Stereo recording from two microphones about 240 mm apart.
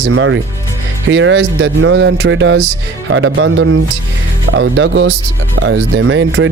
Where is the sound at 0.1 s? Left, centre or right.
Right.